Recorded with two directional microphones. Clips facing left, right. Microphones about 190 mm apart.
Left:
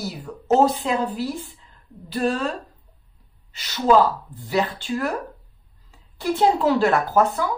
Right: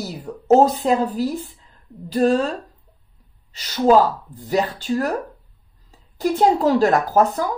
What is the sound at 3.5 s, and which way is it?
Speech, 40° right (ahead or behind).